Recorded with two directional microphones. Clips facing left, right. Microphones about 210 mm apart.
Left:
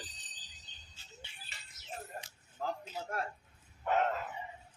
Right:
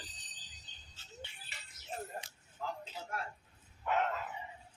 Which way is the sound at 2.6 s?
40° left (ahead or behind).